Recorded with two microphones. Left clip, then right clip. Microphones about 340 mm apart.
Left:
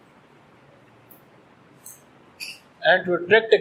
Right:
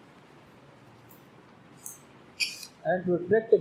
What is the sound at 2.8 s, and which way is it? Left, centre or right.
Speech, left.